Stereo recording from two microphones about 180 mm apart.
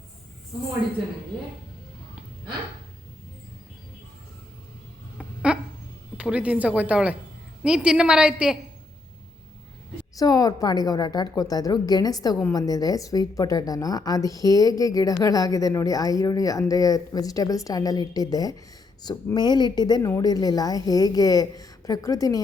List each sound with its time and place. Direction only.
5.1 s a sound: 5° right (ahead or behind)
6.1 s a woman's voice: 5° right (ahead or behind)
10.2 s a woman's voice: 20° left (ahead or behind)